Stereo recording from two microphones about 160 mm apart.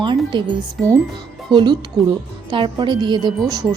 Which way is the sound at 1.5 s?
30° right (ahead or behind).